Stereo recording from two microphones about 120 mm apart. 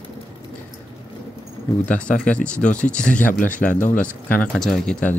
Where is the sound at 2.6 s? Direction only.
90° left.